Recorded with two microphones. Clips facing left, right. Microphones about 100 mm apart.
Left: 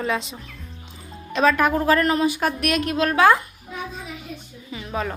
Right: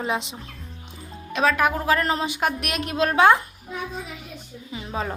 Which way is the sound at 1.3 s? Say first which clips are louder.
Left 3 dB; 5° right (ahead or behind).